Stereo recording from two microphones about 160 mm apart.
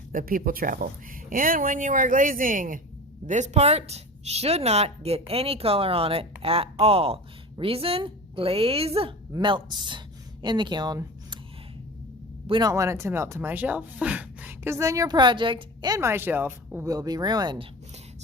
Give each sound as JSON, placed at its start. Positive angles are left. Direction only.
{"t": 0.1, "sound": "speech", "side_deg": -60}
{"t": 3.2, "sound": "a woman's voice", "side_deg": -45}
{"t": 12.5, "sound": "a woman's voice", "side_deg": -30}
{"t": 12.7, "sound": "speech", "side_deg": -20}